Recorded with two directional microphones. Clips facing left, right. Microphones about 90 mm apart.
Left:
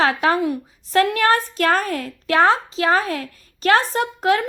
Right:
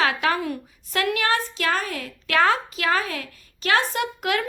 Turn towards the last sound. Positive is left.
turn(degrees=30)  # may be behind; listen again after turning